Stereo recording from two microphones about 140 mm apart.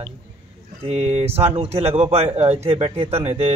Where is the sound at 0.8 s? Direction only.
50° right (ahead or behind).